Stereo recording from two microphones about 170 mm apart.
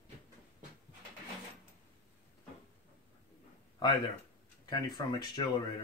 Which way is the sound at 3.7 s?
25° left (ahead or behind).